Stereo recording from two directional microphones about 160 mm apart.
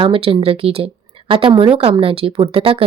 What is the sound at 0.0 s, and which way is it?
A woman's voice, 35° right (ahead or behind).